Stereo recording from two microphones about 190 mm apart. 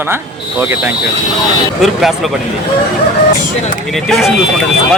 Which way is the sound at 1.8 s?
Centre (ahead or behind).